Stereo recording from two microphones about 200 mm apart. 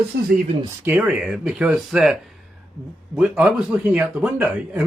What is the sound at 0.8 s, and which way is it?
Speech, 5° right (ahead or behind).